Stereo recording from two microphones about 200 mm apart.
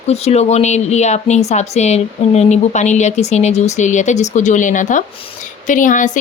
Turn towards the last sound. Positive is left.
turn(degrees=40)  # may be behind; listen again after turning